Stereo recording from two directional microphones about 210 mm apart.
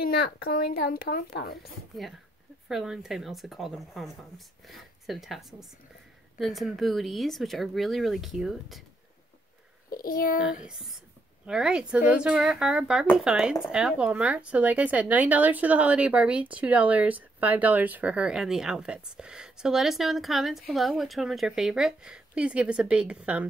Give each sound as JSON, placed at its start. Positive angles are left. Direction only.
{"t": 0.0, "sound": "a woman's voice", "side_deg": 45}
{"t": 2.7, "sound": "speech", "side_deg": 0}
{"t": 9.8, "sound": "a child's voice", "side_deg": 45}
{"t": 10.7, "sound": "speech", "side_deg": 0}